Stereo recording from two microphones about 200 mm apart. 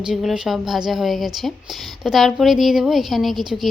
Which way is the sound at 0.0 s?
Centre (ahead or behind).